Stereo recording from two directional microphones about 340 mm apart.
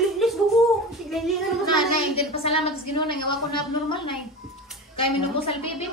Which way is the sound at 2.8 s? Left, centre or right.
Left.